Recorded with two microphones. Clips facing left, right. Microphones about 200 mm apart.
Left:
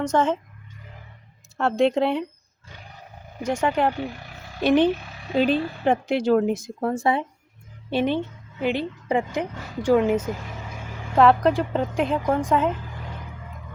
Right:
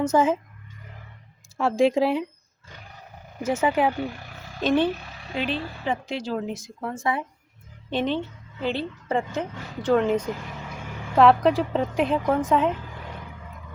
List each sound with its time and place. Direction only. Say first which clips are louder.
0.0 s speech: right 1 dB; 5° right (ahead or behind)
1.5 s a woman's voice: even; centre (ahead or behind)
3.4 s a woman's voice: even; 5° right (ahead or behind)
4.6 s a woman's voice: left 3 dB; 15° left (ahead or behind)
5.4 s speech: left 7 dB; 50° left (ahead or behind)
6.8 s speech: left 5 dB; 35° left (ahead or behind)
7.9 s a woman's voice: left 3 dB; 10° left (ahead or behind)